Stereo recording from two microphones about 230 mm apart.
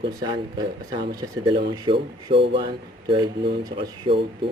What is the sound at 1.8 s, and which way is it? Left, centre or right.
Speech, right.